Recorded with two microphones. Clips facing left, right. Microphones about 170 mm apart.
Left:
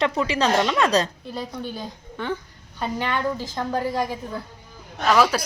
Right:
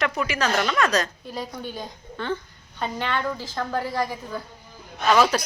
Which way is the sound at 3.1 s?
15° left (ahead or behind).